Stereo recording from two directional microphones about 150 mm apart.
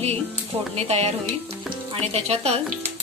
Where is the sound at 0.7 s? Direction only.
45° right (ahead or behind).